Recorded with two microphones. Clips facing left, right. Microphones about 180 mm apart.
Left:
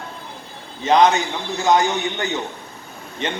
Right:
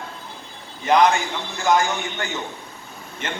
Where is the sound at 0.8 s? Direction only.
20° left (ahead or behind).